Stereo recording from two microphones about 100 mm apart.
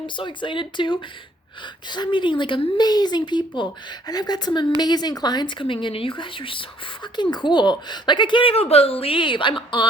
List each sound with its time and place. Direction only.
0.2 s speech: 55° left (ahead or behind)
7.2 s speech: 45° left (ahead or behind)